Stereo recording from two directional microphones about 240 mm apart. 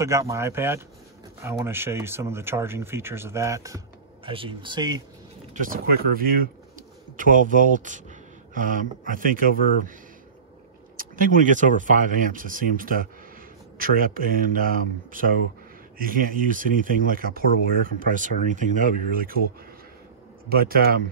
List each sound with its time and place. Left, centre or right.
0.0 s speech: centre
5.5 s speech: right
11.0 s speech: right
20.4 s speech: right